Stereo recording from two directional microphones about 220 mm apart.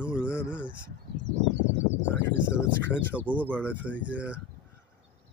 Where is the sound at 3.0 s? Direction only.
5° right (ahead or behind).